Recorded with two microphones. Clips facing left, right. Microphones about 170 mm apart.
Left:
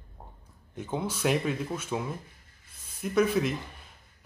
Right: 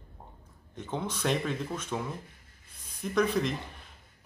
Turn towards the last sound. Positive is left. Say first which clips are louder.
# left 2 dB
turn(degrees=5)  # may be behind; listen again after turning